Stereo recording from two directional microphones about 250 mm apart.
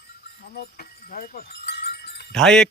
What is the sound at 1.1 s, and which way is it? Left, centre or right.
Sheep, left.